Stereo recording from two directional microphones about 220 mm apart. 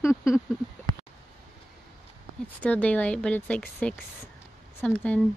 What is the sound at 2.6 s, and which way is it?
Speech, 5° left (ahead or behind).